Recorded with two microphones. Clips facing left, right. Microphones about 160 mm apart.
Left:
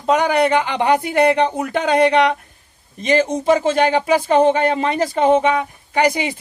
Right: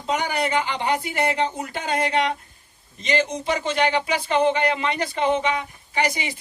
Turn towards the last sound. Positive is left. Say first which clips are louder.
# left 7 dB
turn(degrees=55)  # may be behind; listen again after turning